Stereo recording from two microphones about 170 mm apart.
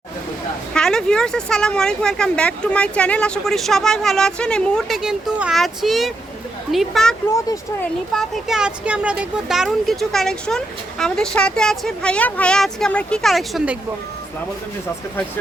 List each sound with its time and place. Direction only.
0.7 s speech: 5° left (ahead or behind)
7.3 s speech: 20° left (ahead or behind)
8.1 s speech: centre (ahead or behind)